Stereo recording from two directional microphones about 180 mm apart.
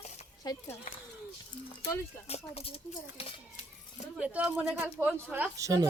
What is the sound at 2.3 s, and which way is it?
Speech, 35° left (ahead or behind).